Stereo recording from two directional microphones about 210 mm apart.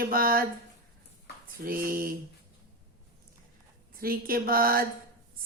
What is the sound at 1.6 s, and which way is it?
Speech, 45° right (ahead or behind).